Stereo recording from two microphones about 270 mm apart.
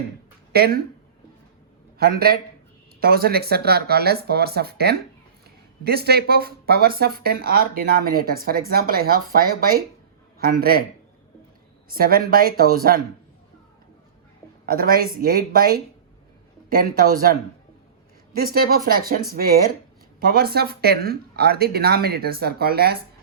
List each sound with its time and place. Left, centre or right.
0.5 s speech: right
2.0 s a man's voice: right
11.9 s speech: right
14.7 s speech: right
18.3 s speech: right